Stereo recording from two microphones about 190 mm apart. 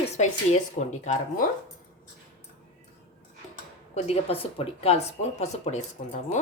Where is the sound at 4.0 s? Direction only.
30° left (ahead or behind).